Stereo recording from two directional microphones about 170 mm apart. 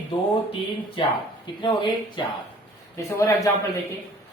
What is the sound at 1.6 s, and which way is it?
A woman's voice, 25° left (ahead or behind).